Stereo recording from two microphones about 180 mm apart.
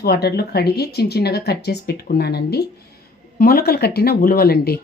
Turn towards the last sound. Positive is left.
turn(degrees=60)  # may be behind; listen again after turning